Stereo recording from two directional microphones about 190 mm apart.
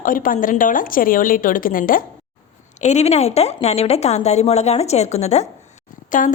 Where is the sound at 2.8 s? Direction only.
35° left (ahead or behind).